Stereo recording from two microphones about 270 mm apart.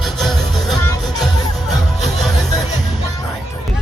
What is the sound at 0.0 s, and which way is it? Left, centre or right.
Music, centre.